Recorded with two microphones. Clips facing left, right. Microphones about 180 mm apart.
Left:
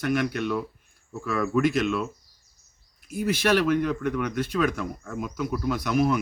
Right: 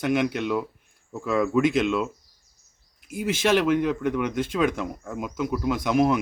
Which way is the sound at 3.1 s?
20° right (ahead or behind).